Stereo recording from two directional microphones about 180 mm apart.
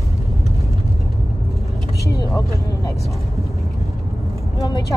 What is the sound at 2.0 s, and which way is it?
Vehicle, 20° left (ahead or behind).